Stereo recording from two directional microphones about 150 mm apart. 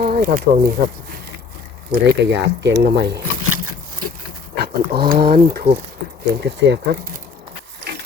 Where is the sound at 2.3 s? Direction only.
90° right.